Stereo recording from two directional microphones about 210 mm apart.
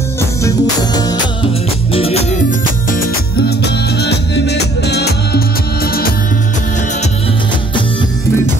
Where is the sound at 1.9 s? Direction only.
30° left (ahead or behind).